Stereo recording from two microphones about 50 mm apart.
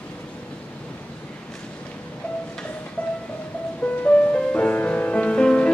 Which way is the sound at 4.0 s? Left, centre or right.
Left.